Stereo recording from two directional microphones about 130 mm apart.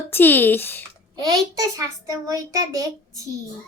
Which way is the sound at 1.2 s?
25° right (ahead or behind).